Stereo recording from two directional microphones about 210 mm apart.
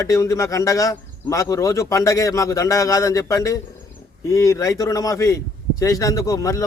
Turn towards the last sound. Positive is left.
turn(degrees=15)  # may be behind; listen again after turning